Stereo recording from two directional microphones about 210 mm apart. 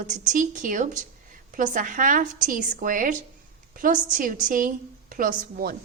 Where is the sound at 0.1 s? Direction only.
35° right (ahead or behind).